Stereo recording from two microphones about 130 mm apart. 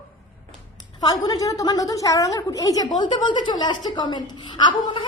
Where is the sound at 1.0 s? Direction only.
30° left (ahead or behind).